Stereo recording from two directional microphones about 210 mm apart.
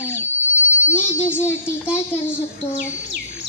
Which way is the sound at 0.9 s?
10° left (ahead or behind).